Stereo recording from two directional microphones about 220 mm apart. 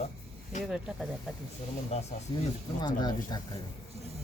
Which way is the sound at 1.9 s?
30° left (ahead or behind).